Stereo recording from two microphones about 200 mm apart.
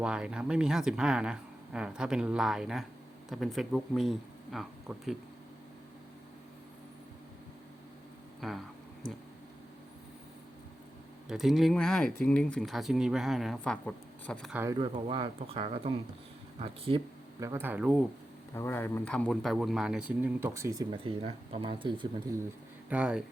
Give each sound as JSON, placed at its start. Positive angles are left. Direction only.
{"t": 0.0, "sound": "speech", "side_deg": -5}
{"t": 8.4, "sound": "speech", "side_deg": 0}
{"t": 11.3, "sound": "speech", "side_deg": 0}
{"t": 14.5, "sound": "speech", "side_deg": -10}
{"t": 14.8, "sound": "speech", "side_deg": -25}
{"t": 17.4, "sound": "speech", "side_deg": -10}
{"t": 18.5, "sound": "speech", "side_deg": 10}
{"t": 22.9, "sound": "speech", "side_deg": -5}